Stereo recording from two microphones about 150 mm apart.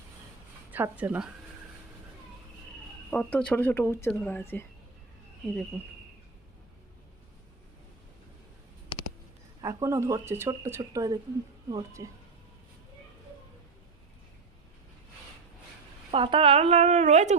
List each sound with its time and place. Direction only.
0.7 s speech: 10° right (ahead or behind)
3.1 s speech: 10° left (ahead or behind)
9.6 s speech: 20° right (ahead or behind)
16.1 s speech: 35° right (ahead or behind)